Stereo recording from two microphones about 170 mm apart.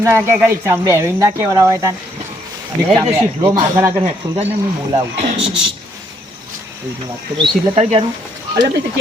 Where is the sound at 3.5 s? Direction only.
20° right (ahead or behind).